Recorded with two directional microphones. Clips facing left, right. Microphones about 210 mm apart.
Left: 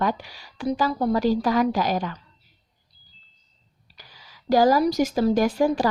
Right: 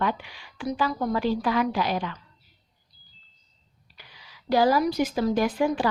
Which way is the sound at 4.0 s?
40° left (ahead or behind).